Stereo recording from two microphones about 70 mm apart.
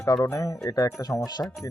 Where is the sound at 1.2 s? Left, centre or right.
Left.